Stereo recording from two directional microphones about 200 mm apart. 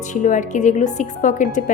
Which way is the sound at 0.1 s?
40° left (ahead or behind).